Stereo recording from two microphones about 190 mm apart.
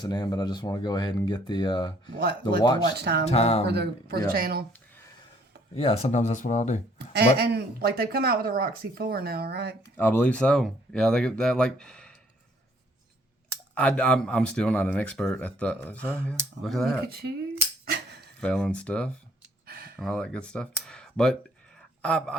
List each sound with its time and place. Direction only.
0.0 s speech: 20° left (ahead or behind)
3.0 s speech: 60° right (ahead or behind)
3.2 s speech: 30° left (ahead or behind)
3.7 s speech: 60° right (ahead or behind)
5.7 s speech: 35° left (ahead or behind)
7.1 s speech: 60° right (ahead or behind)
9.8 s speech: 10° left (ahead or behind)
13.7 s speech: 5° left (ahead or behind)
17.1 s speech: 55° right (ahead or behind)
17.9 s cutlery: 60° right (ahead or behind)
18.3 s speech: 5° left (ahead or behind)
19.6 s a sound: 55° right (ahead or behind)
20.0 s speech: 5° left (ahead or behind)
21.8 s a sound: 5° left (ahead or behind)